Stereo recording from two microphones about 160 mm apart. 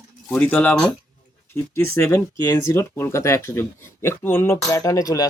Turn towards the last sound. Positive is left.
turn(degrees=20)  # may be behind; listen again after turning